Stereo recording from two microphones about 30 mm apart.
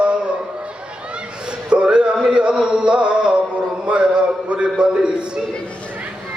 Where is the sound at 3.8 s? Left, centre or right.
Right.